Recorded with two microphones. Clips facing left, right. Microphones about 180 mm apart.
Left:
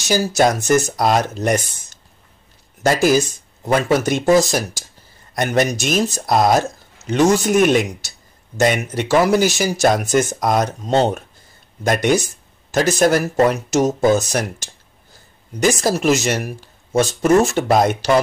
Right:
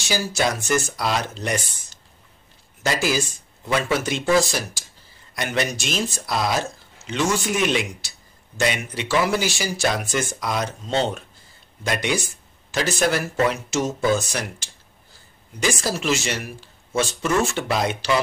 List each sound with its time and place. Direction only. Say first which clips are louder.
0.0 s speech: left 7 dB; 40° left (ahead or behind)
2.8 s speech: left 8 dB; 45° left (ahead or behind)